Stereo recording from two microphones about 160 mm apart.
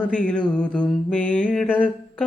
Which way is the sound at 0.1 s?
5° left (ahead or behind).